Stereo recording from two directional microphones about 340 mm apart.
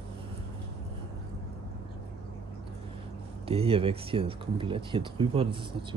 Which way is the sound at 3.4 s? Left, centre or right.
Centre.